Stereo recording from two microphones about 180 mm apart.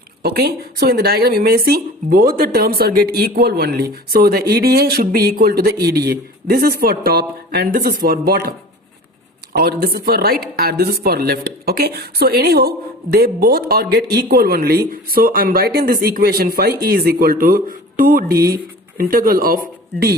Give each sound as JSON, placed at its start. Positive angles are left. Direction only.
{"t": 0.2, "sound": "speech", "side_deg": -60}